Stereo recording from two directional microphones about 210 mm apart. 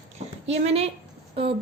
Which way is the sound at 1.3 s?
25° right (ahead or behind).